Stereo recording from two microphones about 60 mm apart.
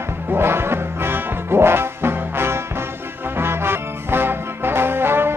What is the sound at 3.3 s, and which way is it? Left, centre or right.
Trombone, right.